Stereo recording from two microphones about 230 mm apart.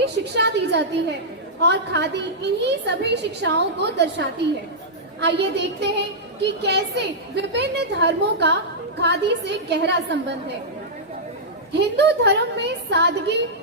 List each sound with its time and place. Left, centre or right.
0.0 s a sound: right
1.6 s a woman's voice: right
11.7 s a woman's voice: right